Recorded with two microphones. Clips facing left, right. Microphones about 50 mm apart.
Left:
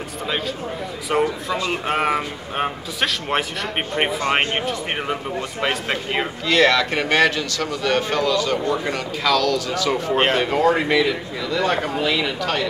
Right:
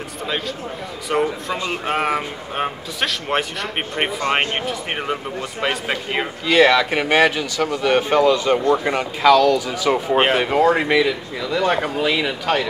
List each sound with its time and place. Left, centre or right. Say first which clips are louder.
1.1 s speech: even; centre